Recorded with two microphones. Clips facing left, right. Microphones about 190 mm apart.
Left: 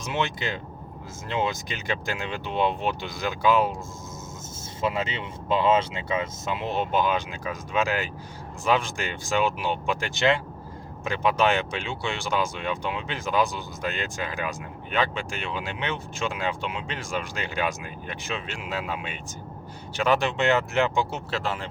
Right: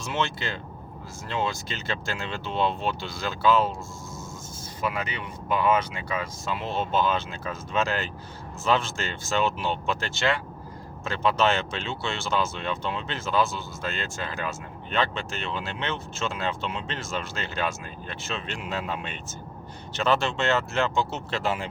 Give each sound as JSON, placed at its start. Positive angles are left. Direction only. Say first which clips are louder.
{"t": 0.0, "sound": "speech", "louder": "left 1 dB", "side_deg": 15}
{"t": 4.8, "sound": "speech", "louder": "left 3 dB", "side_deg": 25}
{"t": 21.4, "sound": "speech", "louder": "right 2 dB", "side_deg": -5}